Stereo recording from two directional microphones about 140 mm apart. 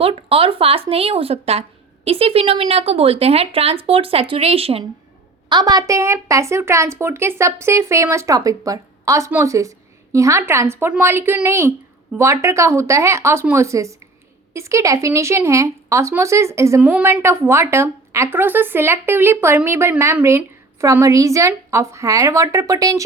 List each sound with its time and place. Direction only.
0.0 s speech: 40° right (ahead or behind)
5.5 s a woman's voice: 30° right (ahead or behind)